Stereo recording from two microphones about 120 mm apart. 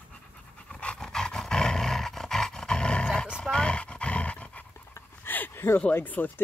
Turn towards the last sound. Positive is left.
turn(degrees=15)  # may be behind; listen again after turning